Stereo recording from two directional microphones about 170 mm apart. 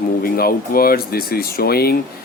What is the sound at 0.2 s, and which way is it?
Speech, 60° left (ahead or behind).